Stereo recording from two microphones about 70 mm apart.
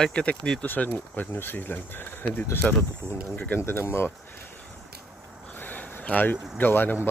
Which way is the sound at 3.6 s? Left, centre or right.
Left.